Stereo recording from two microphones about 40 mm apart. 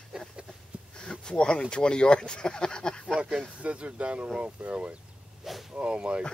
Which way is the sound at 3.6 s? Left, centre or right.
Right.